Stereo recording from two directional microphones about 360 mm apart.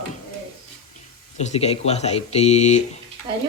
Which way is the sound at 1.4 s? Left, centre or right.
Centre.